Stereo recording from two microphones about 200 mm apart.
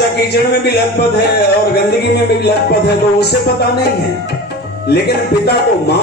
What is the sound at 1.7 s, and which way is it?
Music, 55° left (ahead or behind).